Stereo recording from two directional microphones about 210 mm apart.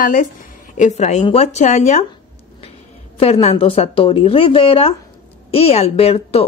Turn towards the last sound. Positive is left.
turn(degrees=30)  # may be behind; listen again after turning